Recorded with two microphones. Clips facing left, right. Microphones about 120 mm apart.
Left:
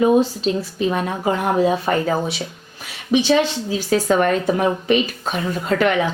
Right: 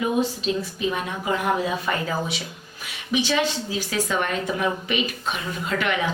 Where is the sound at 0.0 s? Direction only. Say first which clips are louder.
Left 8 dB; 35° left (ahead or behind).